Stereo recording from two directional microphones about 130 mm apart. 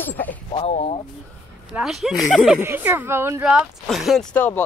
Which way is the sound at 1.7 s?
5° right (ahead or behind).